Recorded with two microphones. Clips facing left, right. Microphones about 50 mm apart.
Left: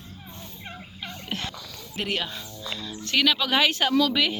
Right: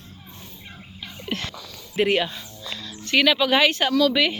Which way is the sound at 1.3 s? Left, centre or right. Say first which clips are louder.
Right 4 dB; centre.